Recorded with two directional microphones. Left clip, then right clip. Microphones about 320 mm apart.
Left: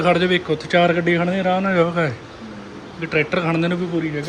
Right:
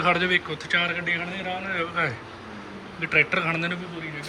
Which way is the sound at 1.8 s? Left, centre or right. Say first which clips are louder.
Left 7 dB; centre.